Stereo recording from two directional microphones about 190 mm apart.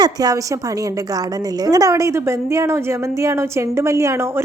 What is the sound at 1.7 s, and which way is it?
A woman's voice, 20° right (ahead or behind).